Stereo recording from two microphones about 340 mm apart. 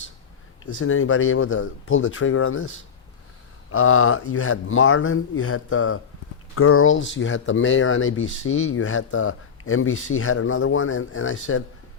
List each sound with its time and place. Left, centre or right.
0.8 s speech: left